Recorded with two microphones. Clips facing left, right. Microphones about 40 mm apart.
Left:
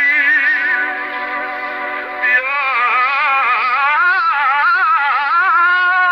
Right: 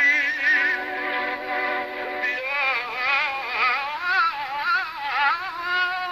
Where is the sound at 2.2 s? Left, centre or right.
Left.